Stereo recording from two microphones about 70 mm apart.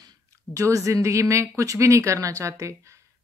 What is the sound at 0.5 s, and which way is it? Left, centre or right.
Speech, right.